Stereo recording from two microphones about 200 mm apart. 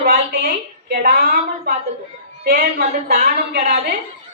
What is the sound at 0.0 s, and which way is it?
A woman's voice, 45° right (ahead or behind).